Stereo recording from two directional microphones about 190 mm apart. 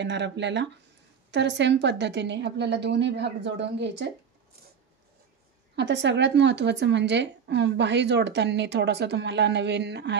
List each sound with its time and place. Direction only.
0.0 s speech: 70° right (ahead or behind)
5.8 s speech: 65° right (ahead or behind)